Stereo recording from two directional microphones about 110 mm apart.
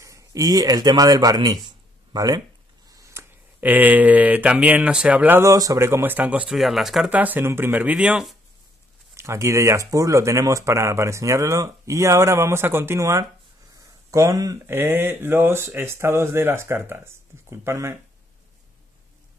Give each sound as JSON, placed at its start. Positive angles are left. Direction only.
{"t": 0.0, "sound": "speech", "side_deg": -30}
{"t": 2.9, "sound": "a sound", "side_deg": -25}
{"t": 3.6, "sound": "speech", "side_deg": -15}
{"t": 5.4, "sound": "speech", "side_deg": -30}
{"t": 6.5, "sound": "speech", "side_deg": 0}
{"t": 7.2, "sound": "speech", "side_deg": -15}
{"t": 9.1, "sound": "speech", "side_deg": -25}
{"t": 14.7, "sound": "speech", "side_deg": -20}